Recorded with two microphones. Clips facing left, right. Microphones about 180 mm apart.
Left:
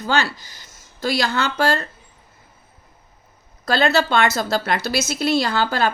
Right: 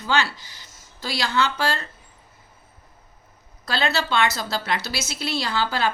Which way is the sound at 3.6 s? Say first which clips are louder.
Left 6 dB; 45° left (ahead or behind).